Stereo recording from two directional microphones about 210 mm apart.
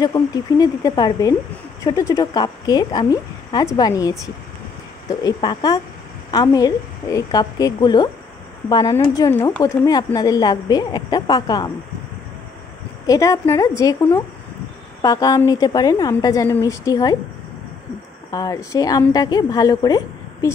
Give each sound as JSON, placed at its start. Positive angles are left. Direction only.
{"t": 0.0, "sound": "a woman's voice", "side_deg": 20}
{"t": 5.2, "sound": "a woman's voice", "side_deg": 20}
{"t": 13.0, "sound": "a woman's voice", "side_deg": 15}
{"t": 18.3, "sound": "a woman's voice", "side_deg": 15}